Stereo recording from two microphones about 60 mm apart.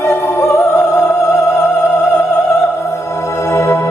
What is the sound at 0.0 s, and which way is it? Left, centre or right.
Opera, left.